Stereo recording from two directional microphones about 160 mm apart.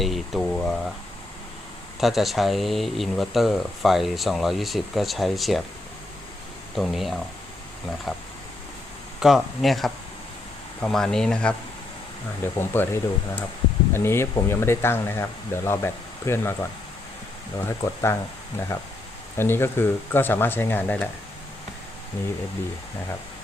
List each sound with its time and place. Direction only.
0.0 s a sound: centre (ahead or behind)
2.0 s speech: centre (ahead or behind)
6.7 s speech: centre (ahead or behind)
9.2 s speech: centre (ahead or behind)
12.5 s speech: 15° left (ahead or behind)